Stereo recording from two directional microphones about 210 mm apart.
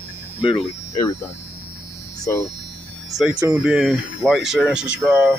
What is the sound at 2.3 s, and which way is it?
Speech, 10° left (ahead or behind).